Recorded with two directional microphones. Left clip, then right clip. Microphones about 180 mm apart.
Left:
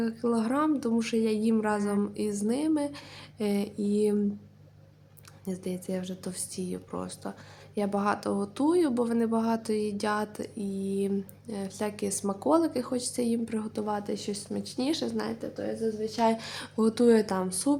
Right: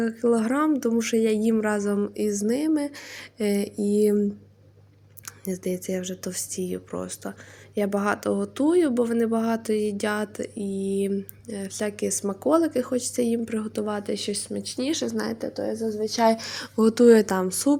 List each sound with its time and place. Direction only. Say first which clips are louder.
0.0 s speech: right 6 dB; 20° right (ahead or behind)
5.5 s speech: right 6 dB; 20° right (ahead or behind)